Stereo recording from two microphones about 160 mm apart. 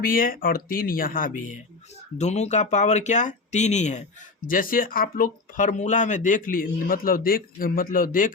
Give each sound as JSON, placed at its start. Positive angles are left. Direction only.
{"t": 0.0, "sound": "speech", "side_deg": 65}
{"t": 2.1, "sound": "speech", "side_deg": 45}
{"t": 4.4, "sound": "speech", "side_deg": 60}